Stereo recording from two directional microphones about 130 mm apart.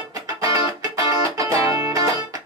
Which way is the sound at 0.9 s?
25° right (ahead or behind).